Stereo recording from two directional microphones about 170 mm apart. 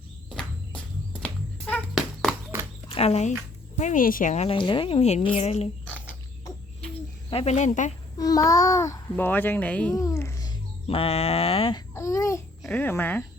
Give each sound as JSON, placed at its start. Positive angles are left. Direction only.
{"t": 1.2, "sound": "music", "side_deg": 10}
{"t": 2.9, "sound": "a woman's voice", "side_deg": 35}
{"t": 6.8, "sound": "cricket", "side_deg": 35}
{"t": 8.2, "sound": "a child's voice", "side_deg": 20}
{"t": 9.9, "sound": "a child's voice", "side_deg": 20}
{"t": 10.8, "sound": "a woman's voice", "side_deg": 35}
{"t": 11.9, "sound": "a child's voice", "side_deg": 20}